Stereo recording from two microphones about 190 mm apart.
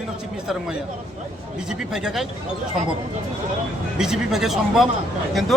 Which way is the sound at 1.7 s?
5° right (ahead or behind).